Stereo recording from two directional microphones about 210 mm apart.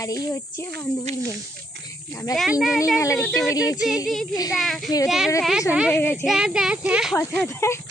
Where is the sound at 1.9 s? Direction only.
15° left (ahead or behind).